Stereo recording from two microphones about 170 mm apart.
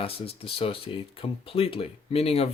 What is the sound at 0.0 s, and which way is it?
Speech, 35° left (ahead or behind).